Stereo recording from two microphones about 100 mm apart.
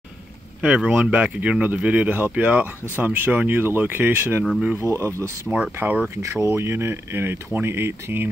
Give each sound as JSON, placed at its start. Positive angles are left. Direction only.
{"t": 0.6, "sound": "speech", "side_deg": -10}
{"t": 5.8, "sound": "speech", "side_deg": -20}
{"t": 6.4, "sound": "speech", "side_deg": -30}